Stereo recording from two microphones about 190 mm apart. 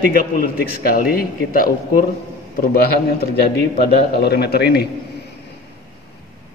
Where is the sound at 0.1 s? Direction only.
50° left (ahead or behind).